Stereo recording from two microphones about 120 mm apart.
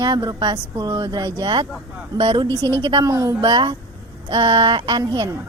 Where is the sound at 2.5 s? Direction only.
20° left (ahead or behind).